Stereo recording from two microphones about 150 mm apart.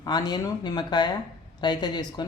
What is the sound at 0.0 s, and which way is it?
Speech, 25° left (ahead or behind).